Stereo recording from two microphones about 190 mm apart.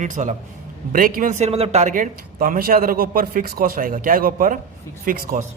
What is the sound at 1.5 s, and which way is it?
A man's voice, 30° right (ahead or behind).